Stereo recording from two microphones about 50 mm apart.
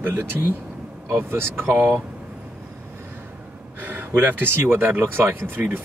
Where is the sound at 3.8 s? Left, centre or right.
Right.